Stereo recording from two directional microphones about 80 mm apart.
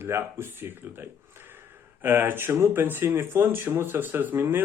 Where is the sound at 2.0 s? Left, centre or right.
Right.